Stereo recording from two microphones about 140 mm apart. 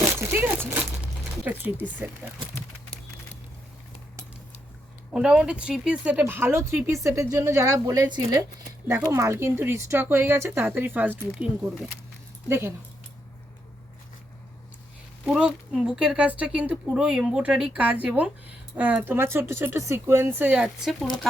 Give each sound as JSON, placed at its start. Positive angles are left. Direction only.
{"t": 0.0, "sound": "crumpling", "side_deg": -15}
{"t": 1.5, "sound": "speech", "side_deg": -10}
{"t": 5.1, "sound": "a woman's voice", "side_deg": -5}
{"t": 12.5, "sound": "a woman's voice", "side_deg": -15}
{"t": 15.3, "sound": "a woman's voice", "side_deg": -5}